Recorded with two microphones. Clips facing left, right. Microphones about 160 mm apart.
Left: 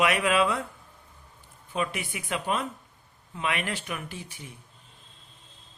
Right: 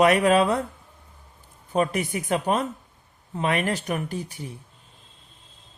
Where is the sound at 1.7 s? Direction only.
40° right (ahead or behind).